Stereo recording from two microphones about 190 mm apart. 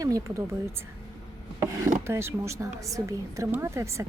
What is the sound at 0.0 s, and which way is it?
Speech, 15° right (ahead or behind).